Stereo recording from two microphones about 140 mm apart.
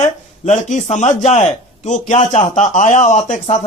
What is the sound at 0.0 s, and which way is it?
A man's voice, 55° left (ahead or behind).